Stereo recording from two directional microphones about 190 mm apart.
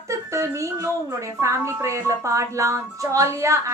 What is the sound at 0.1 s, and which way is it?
A woman's voice, 15° right (ahead or behind).